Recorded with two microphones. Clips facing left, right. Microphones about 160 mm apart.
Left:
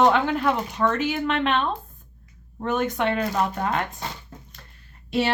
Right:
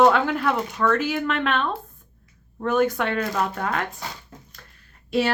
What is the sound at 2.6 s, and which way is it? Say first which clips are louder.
Speech: right 4 dB; centre (ahead or behind).